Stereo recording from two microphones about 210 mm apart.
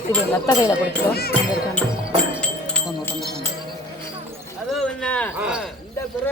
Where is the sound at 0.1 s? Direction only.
15° left (ahead or behind).